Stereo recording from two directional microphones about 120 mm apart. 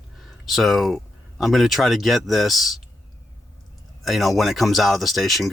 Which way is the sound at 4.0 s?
Centre (ahead or behind).